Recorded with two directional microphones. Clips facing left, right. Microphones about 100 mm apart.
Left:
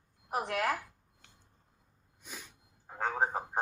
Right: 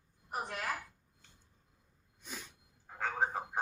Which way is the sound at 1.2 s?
75° left (ahead or behind).